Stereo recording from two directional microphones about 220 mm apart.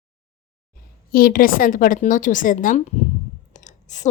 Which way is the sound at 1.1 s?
40° left (ahead or behind).